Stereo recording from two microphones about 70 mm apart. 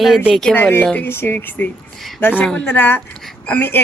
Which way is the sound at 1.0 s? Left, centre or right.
Left.